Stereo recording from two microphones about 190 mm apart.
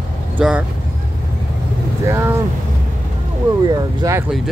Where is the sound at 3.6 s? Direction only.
20° right (ahead or behind).